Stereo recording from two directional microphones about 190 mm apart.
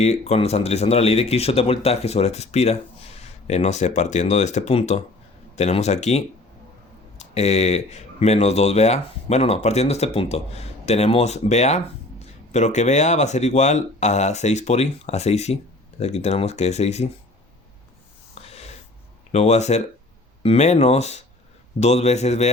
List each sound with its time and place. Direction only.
0.0 s speech: 35° left (ahead or behind)
18.4 s snort: 35° left (ahead or behind)
19.3 s speech: 35° left (ahead or behind)